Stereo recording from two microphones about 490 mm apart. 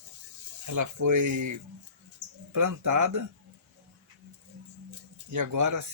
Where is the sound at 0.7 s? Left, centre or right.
Right.